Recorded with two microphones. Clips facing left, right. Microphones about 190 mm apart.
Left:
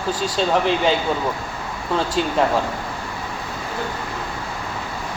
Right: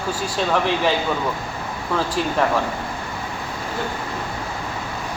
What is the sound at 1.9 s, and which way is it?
Speech, 20° left (ahead or behind).